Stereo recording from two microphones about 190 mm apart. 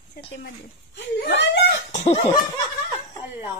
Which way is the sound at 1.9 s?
40° left (ahead or behind).